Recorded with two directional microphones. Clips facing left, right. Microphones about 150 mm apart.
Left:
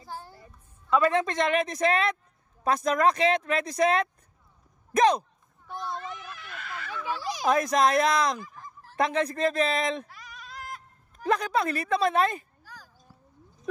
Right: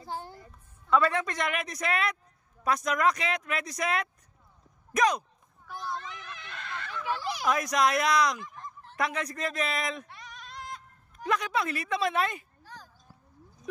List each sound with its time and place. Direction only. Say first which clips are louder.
0.1 s music: right 3 dB; 20° right (ahead or behind)
0.8 s speech: left 2 dB; 20° left (ahead or behind)
5.8 s a sound: left 2 dB; centre (ahead or behind)
7.4 s speech: left 4 dB; 30° left (ahead or behind)
8.5 s goose: right 2 dB; 5° left (ahead or behind)
8.9 s speech: left 6 dB; 25° left (ahead or behind)
10.0 s bleat: even; 5° left (ahead or behind)
11.2 s speech: left 4 dB; 35° left (ahead or behind)
12.6 s a sound: right 1 dB; 10° left (ahead or behind)